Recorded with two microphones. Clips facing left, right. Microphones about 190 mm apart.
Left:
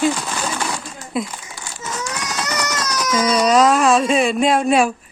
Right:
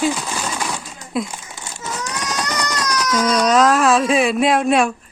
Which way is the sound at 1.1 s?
Centre (ahead or behind).